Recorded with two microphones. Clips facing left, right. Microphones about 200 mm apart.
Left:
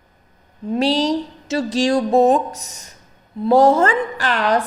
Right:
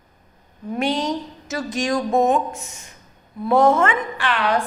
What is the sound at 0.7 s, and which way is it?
Speech, 30° left (ahead or behind).